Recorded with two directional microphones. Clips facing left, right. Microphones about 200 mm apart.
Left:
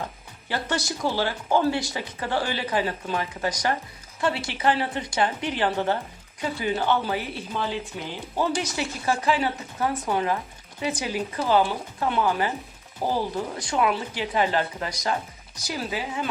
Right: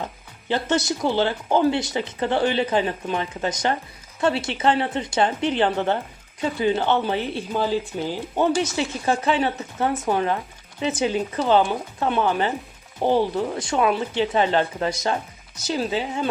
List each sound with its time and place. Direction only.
0.4 s speech: 20° right (ahead or behind)
7.5 s speech: 35° right (ahead or behind)
8.4 s speech: 25° right (ahead or behind)